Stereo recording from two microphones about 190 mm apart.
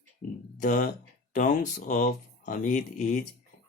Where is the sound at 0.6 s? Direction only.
40° left (ahead or behind).